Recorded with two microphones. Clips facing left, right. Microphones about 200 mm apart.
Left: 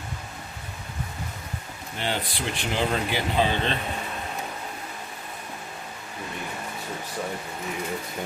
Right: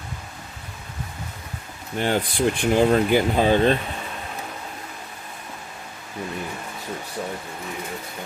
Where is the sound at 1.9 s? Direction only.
50° right (ahead or behind).